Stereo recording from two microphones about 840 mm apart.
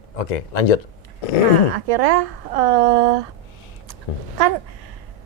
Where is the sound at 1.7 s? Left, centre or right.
Right.